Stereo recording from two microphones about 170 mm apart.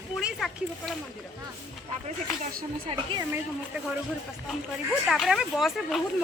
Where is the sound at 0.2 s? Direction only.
Centre (ahead or behind).